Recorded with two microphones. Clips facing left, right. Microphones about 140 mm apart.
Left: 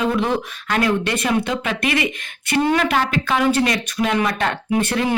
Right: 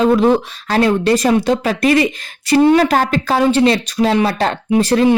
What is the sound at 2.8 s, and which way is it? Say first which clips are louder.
A man's voice: right 5 dB; 40° right (ahead or behind).